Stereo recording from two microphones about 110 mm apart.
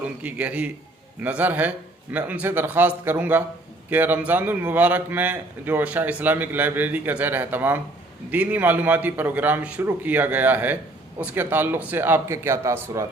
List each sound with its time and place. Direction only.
0.0 s a man's voice: 15° right (ahead or behind); by 13.1 s 30° right (ahead or behind)